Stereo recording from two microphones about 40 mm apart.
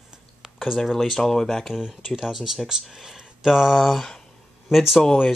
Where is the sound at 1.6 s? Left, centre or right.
Centre.